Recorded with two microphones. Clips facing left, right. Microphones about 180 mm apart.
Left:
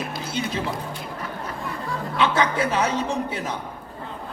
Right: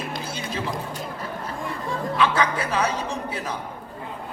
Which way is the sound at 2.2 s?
25° left (ahead or behind).